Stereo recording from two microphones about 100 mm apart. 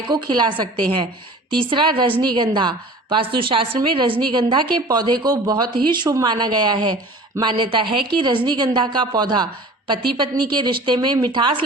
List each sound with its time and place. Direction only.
0.1 s a woman's voice: 50° right (ahead or behind)